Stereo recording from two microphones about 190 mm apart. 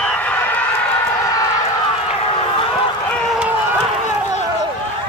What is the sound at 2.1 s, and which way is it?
Run, 30° left (ahead or behind).